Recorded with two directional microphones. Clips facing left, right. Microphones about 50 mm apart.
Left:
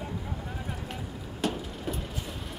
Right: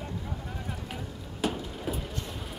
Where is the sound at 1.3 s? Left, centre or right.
Centre.